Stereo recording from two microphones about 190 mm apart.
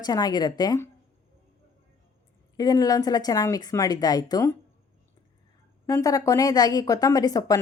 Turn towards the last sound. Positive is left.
turn(degrees=20)  # may be behind; listen again after turning